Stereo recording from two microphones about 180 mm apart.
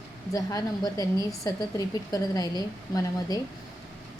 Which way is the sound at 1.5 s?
20° left (ahead or behind).